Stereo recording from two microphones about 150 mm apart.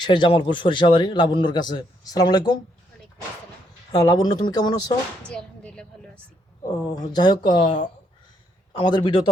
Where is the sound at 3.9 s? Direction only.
25° left (ahead or behind).